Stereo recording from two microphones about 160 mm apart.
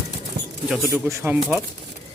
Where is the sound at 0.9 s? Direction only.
15° right (ahead or behind).